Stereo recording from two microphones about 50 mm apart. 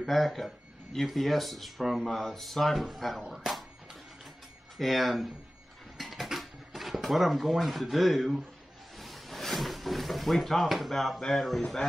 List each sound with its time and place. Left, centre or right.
0.0 s speech: centre
4.7 s speech: centre
5.9 s a sound: centre
9.0 s speech: centre